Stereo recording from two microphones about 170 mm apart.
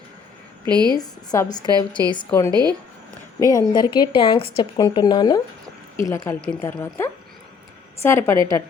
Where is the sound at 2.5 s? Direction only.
25° right (ahead or behind).